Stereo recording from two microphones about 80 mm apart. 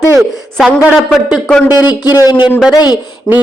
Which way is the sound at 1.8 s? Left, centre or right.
Left.